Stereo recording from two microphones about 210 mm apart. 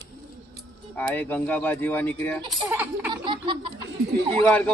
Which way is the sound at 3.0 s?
25° right (ahead or behind).